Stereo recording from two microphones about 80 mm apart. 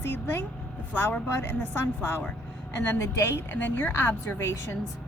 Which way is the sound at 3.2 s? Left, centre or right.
Left.